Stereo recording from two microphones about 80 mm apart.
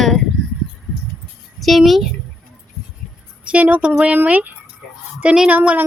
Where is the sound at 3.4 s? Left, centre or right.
Centre.